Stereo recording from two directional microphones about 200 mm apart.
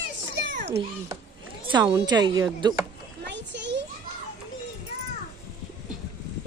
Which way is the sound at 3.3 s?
60° right (ahead or behind).